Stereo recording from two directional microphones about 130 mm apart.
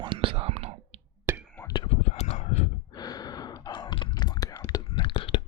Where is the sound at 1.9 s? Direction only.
55° left (ahead or behind).